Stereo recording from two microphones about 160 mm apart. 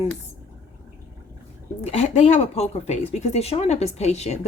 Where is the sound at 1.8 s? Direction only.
40° left (ahead or behind).